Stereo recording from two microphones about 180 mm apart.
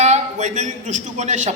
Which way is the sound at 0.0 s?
40° right (ahead or behind).